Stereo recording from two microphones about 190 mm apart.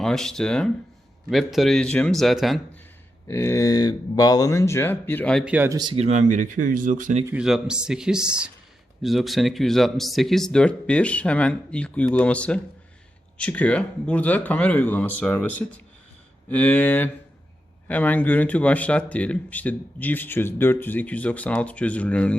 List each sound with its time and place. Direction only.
0.0 s speech: 5° left (ahead or behind)
3.2 s speech: 15° left (ahead or behind)
5.5 s speech: 15° right (ahead or behind); by 7.2 s 45° right (ahead or behind)
7.3 s speech: 5° right (ahead or behind)